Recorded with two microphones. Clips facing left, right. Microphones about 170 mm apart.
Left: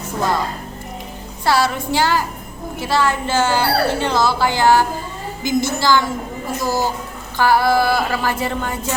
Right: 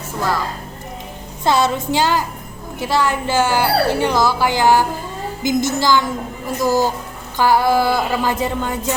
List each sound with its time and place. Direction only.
1.5 s speech: 20° right (ahead or behind)